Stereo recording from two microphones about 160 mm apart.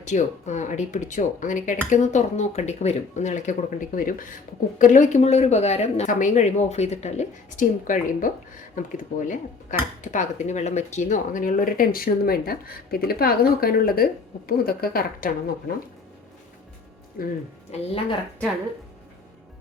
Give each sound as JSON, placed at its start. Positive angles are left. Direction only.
{"t": 0.0, "sound": "speech", "side_deg": 50}
{"t": 17.2, "sound": "speech", "side_deg": 65}